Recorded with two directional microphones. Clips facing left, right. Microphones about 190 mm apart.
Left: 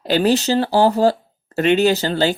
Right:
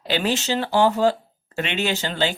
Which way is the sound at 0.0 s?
40° left (ahead or behind).